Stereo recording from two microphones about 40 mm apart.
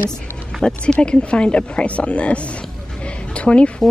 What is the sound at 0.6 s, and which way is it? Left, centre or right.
A woman's voice, left.